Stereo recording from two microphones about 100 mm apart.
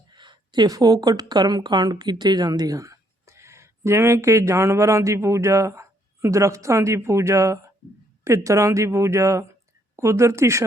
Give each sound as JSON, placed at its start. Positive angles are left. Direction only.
{"t": 0.1, "sound": "speech", "side_deg": -50}